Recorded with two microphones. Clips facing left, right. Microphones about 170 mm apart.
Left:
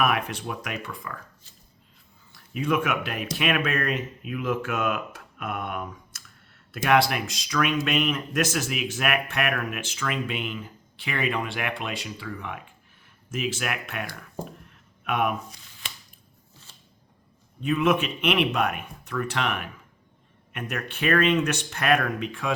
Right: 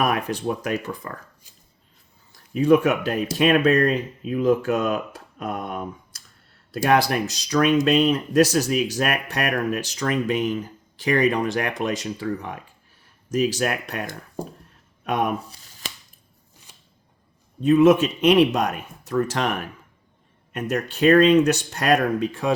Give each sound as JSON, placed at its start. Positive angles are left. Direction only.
{"t": 0.0, "sound": "speech", "side_deg": -35}
{"t": 2.3, "sound": "speech", "side_deg": -35}
{"t": 16.7, "sound": "a sound", "side_deg": -15}
{"t": 17.6, "sound": "speech", "side_deg": -35}